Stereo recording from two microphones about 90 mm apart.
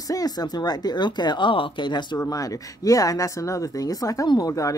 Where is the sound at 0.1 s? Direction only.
45° left (ahead or behind).